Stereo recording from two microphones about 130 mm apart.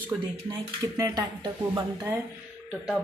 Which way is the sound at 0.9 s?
25° right (ahead or behind).